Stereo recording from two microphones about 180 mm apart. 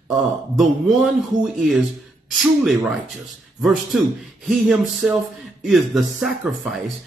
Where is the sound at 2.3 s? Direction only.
Centre (ahead or behind).